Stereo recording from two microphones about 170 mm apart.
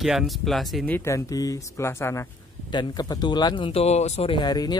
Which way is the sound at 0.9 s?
15° left (ahead or behind).